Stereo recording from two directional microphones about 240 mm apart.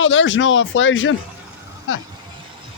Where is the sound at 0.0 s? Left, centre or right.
Left.